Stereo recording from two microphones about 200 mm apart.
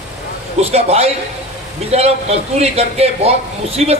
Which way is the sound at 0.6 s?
30° right (ahead or behind).